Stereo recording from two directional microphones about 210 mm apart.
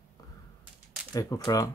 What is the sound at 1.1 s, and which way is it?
Speech, 15° left (ahead or behind).